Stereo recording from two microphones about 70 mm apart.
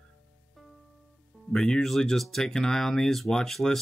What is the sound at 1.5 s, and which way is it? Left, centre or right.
Speech, centre.